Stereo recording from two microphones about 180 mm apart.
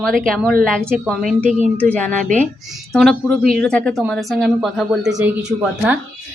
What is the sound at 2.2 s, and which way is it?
Speech, 45° right (ahead or behind).